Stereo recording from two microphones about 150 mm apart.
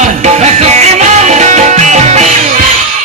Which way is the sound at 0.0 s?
50° right (ahead or behind).